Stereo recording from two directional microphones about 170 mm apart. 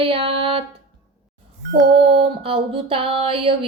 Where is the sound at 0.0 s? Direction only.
30° right (ahead or behind).